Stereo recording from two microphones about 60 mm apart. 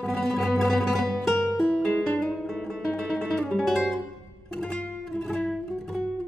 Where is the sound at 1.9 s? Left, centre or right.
Centre.